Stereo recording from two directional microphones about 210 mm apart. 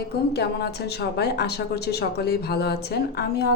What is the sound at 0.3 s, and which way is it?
A woman's voice, 50° left (ahead or behind).